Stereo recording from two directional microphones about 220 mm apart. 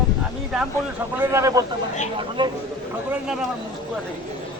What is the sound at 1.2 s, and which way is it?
A man's voice, 10° right (ahead or behind).